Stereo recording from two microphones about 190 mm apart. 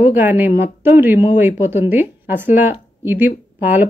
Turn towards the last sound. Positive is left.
turn(degrees=-10)  # may be behind; listen again after turning